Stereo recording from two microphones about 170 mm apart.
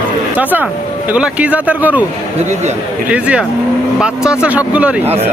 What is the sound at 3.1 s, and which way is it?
Speech, 5° right (ahead or behind).